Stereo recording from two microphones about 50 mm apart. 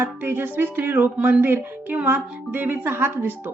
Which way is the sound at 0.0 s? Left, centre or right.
Right.